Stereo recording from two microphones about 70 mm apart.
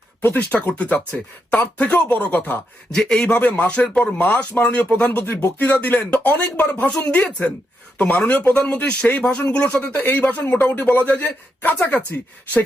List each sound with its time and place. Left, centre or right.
0.2 s speech: left
2.9 s speech: centre
5.1 s speech: left